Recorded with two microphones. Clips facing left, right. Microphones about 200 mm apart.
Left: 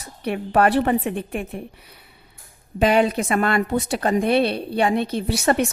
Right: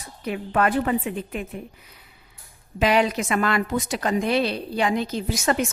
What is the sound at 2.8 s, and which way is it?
Speech, 30° left (ahead or behind).